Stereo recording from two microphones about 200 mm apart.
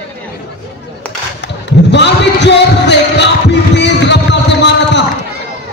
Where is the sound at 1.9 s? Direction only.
60° left (ahead or behind).